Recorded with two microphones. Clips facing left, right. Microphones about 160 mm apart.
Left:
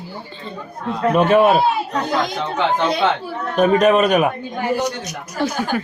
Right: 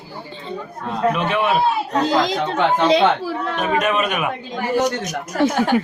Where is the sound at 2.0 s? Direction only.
90° right.